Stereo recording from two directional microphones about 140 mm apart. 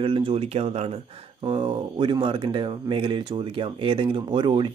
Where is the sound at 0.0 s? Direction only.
40° right (ahead or behind).